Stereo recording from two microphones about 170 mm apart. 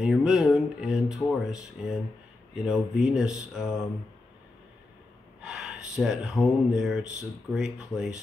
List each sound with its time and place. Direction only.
0.0 s speech: 5° right (ahead or behind)
5.4 s speech: 5° right (ahead or behind)